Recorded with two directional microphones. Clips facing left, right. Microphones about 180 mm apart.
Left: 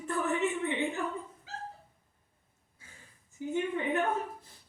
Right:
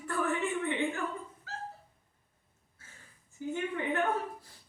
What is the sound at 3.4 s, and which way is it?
Speech, 15° left (ahead or behind).